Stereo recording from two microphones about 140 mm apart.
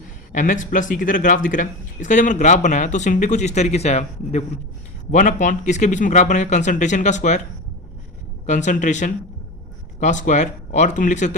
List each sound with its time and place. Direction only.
0.3 s speech: 65° left (ahead or behind)
5.1 s speech: 65° left (ahead or behind)
8.4 s speech: 60° left (ahead or behind)